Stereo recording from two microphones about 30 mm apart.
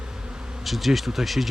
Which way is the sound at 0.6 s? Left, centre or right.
Centre.